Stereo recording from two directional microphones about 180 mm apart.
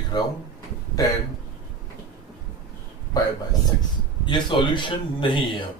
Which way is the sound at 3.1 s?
20° left (ahead or behind).